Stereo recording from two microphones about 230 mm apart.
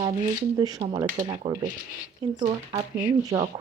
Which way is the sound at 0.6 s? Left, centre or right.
Centre.